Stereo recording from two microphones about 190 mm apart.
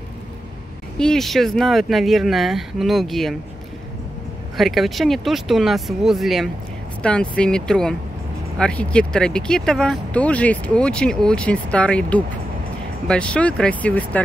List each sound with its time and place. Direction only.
0.9 s speech: 5° left (ahead or behind)
4.6 s speech: centre (ahead or behind)